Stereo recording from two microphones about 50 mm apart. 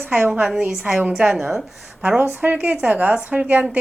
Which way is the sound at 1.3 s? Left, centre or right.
Centre.